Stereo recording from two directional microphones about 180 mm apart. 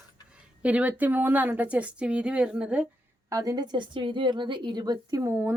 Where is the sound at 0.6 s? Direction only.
5° right (ahead or behind).